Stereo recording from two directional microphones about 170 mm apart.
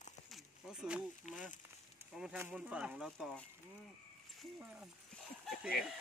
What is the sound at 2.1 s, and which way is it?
Speech, 5° right (ahead or behind).